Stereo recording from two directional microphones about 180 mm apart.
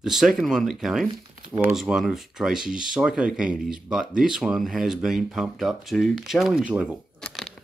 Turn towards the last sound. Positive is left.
turn(degrees=5)  # may be behind; listen again after turning